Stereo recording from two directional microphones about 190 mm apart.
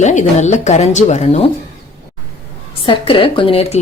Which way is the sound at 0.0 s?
40° left (ahead or behind).